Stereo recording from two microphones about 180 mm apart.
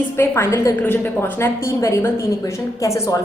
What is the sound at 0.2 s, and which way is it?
A woman's voice, 15° left (ahead or behind).